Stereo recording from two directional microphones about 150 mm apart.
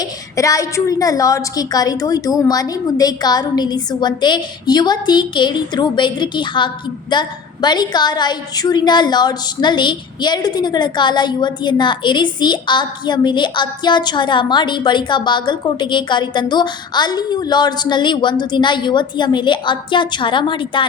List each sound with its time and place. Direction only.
0.0 s a woman's voice: 20° left (ahead or behind)